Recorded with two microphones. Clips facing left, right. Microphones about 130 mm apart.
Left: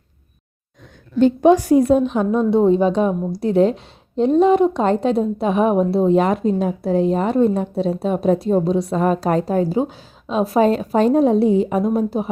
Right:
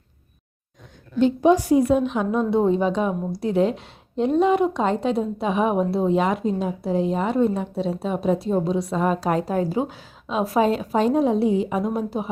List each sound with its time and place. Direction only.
1.2 s a woman's voice: 50° left (ahead or behind); by 2.4 s 35° left (ahead or behind)
2.5 s a woman's voice: 25° left (ahead or behind)
10.6 s a woman's voice: 40° left (ahead or behind)